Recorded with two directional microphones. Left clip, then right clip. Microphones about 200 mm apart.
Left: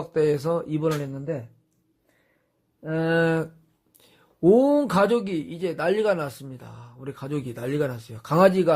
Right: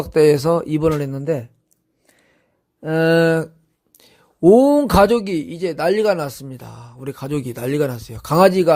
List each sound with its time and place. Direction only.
0.1 s speech: 40° right (ahead or behind)
2.8 s speech: 40° right (ahead or behind)